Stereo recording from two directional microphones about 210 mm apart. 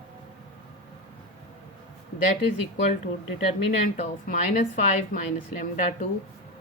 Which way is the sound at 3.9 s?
40° left (ahead or behind).